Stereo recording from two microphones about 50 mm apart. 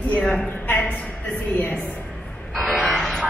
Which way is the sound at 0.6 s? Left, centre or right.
Left.